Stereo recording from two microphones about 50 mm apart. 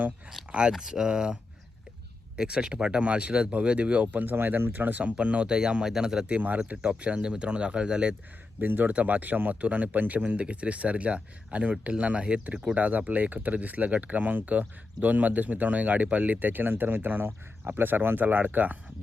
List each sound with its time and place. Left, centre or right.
0.7 s speech: centre; by 4.0 s right
4.0 s speech: right; by 6.3 s centre
6.3 s speech: right
8.6 s speech: right
8.9 s speech: right